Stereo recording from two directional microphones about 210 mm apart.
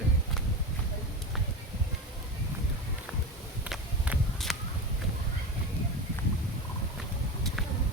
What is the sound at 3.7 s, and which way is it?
Walk, 5° right (ahead or behind).